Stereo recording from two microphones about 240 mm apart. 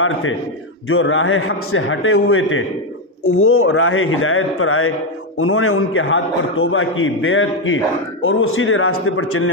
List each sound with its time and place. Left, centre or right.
0.0 s a man's voice: left